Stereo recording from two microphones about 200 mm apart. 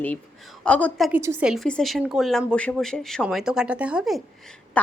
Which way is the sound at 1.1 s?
15° right (ahead or behind).